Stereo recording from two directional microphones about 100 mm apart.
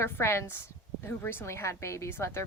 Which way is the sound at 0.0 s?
25° left (ahead or behind).